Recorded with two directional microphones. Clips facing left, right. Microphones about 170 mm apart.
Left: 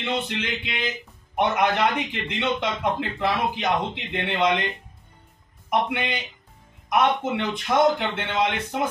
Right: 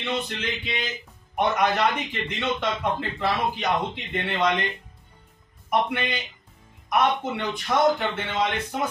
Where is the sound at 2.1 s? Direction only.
15° left (ahead or behind).